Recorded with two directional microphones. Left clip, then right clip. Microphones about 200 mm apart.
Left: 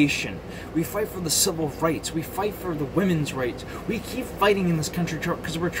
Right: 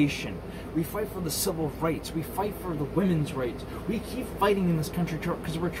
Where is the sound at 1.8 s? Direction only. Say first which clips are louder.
Left 6 dB; 5° left (ahead or behind).